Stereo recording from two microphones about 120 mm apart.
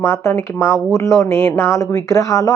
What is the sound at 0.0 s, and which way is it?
Speech, 25° left (ahead or behind).